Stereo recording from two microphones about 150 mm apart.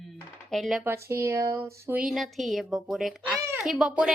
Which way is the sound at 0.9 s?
20° right (ahead or behind).